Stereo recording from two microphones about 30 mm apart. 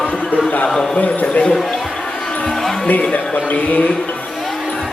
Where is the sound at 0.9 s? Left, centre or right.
Left.